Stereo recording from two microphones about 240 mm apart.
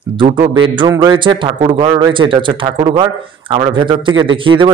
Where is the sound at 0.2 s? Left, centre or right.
Centre.